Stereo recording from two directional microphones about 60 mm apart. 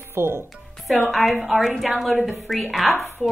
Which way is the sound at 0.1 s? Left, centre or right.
Right.